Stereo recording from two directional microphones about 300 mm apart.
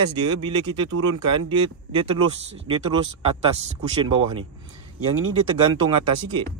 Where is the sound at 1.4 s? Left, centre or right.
Centre.